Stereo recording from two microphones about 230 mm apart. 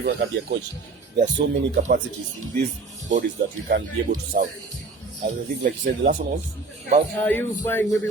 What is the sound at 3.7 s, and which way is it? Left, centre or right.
Speech, right.